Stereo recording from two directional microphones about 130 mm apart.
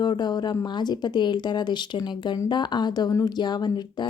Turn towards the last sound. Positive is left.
turn(degrees=35)  # may be behind; listen again after turning